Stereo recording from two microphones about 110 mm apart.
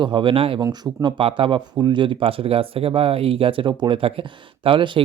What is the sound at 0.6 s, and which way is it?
Speech, 40° right (ahead or behind).